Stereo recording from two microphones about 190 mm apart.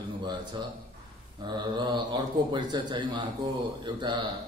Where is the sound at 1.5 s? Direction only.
20° right (ahead or behind).